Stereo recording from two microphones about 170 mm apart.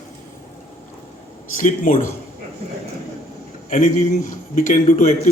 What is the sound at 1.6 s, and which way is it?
Speech, 50° left (ahead or behind).